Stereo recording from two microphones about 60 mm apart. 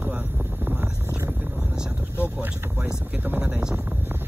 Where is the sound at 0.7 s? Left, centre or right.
Right.